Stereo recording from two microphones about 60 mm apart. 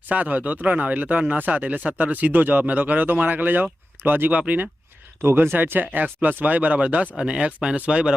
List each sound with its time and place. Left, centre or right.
0.1 s speech: right